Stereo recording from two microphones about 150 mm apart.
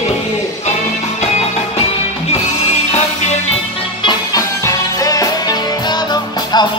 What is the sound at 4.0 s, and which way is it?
Music, 30° left (ahead or behind).